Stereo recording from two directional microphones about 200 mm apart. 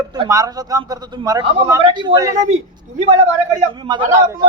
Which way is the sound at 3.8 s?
20° right (ahead or behind).